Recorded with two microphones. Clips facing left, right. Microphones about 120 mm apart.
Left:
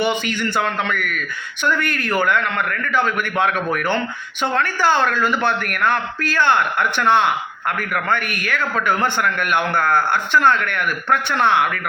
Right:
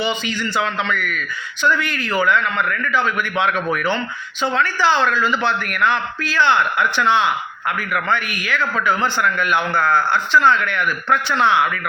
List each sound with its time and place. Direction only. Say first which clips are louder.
0.0 s a man's voice: left 2 dB; 60° left (ahead or behind)